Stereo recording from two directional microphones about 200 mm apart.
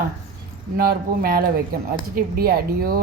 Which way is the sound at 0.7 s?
50° right (ahead or behind).